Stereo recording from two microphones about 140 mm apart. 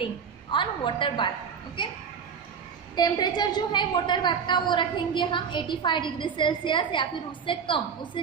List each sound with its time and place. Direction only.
0.0 s a woman's voice: 35° left (ahead or behind)
3.0 s a woman's voice: 30° left (ahead or behind)